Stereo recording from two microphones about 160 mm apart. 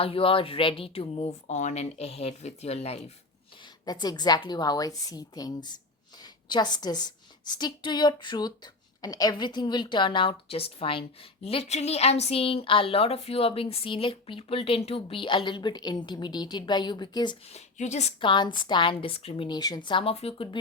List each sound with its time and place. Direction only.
0.0 s a woman's voice: 35° left (ahead or behind)
3.8 s a woman's voice: 25° left (ahead or behind)
17.5 s speech: 45° left (ahead or behind)
18.2 s a woman's voice: 30° left (ahead or behind)